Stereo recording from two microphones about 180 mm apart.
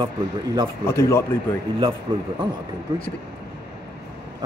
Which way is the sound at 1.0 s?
15° left (ahead or behind).